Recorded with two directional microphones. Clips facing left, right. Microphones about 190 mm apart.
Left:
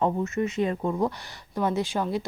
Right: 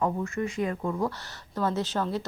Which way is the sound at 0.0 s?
20° left (ahead or behind).